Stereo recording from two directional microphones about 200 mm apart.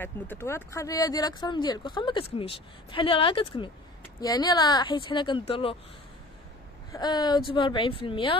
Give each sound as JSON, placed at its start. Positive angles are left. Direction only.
{"t": 0.0, "sound": "speech", "side_deg": 10}
{"t": 6.9, "sound": "speech", "side_deg": 20}